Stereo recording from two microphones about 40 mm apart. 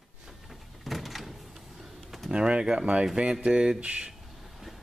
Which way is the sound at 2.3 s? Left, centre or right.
Right.